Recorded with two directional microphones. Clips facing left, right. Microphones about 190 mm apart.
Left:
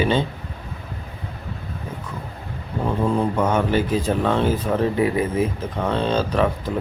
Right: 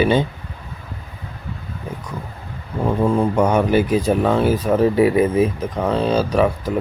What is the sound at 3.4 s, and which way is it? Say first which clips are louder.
Speech: right 4 dB; 15° right (ahead or behind).